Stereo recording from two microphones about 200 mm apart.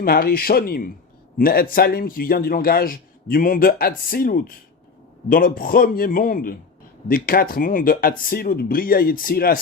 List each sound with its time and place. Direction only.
0.0 s a man's voice: 50° left (ahead or behind)